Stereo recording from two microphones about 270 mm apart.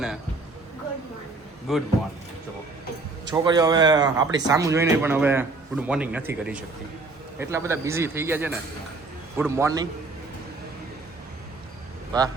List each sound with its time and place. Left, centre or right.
1.7 s speech: centre
3.2 s speech: centre
12.1 s speech: centre